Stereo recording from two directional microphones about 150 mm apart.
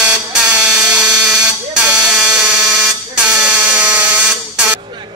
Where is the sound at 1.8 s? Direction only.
5° right (ahead or behind).